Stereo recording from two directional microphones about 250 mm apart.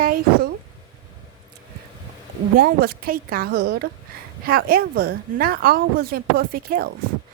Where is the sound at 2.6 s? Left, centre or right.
Right.